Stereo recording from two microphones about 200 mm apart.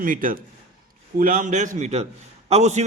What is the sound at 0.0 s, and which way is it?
A man's voice, 45° right (ahead or behind).